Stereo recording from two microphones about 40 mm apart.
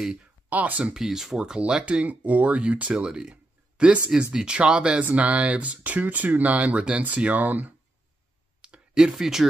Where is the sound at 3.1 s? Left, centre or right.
Right.